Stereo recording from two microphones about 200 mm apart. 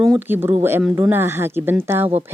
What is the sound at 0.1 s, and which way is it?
Speech, 10° right (ahead or behind).